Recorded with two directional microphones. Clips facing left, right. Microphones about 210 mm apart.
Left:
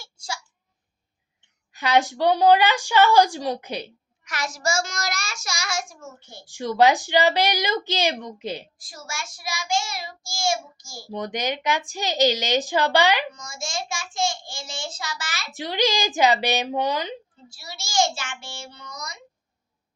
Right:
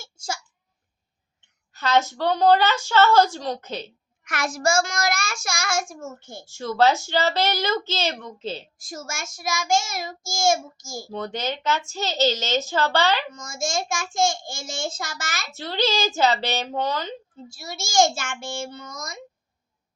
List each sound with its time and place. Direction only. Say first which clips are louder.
1.7 s a woman's voice: left 1 dB; 15° left (ahead or behind)
4.2 s child singing: right 4 dB; 55° right (ahead or behind)
6.4 s a woman's voice: left 1 dB; 15° left (ahead or behind)
8.8 s child singing: right 3 dB; 45° right (ahead or behind)
11.1 s a woman's voice: left 2 dB; 15° left (ahead or behind)
13.3 s child singing: right 5 dB; 45° right (ahead or behind)
15.5 s a woman's voice: left 1 dB; 15° left (ahead or behind)
17.3 s child singing: right 6 dB; 45° right (ahead or behind)